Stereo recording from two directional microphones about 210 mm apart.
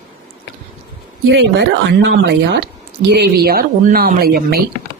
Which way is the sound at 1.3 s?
55° right (ahead or behind).